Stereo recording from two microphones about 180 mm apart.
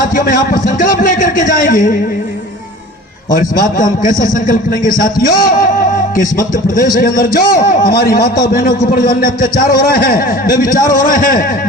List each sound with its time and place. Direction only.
0.0 s a man's voice: 50° left (ahead or behind)
3.3 s a man's voice: 50° left (ahead or behind)